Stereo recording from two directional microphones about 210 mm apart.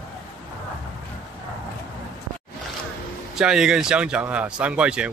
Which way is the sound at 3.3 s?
5° right (ahead or behind).